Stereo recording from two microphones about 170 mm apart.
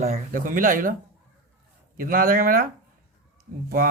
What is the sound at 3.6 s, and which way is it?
Speech, 60° right (ahead or behind).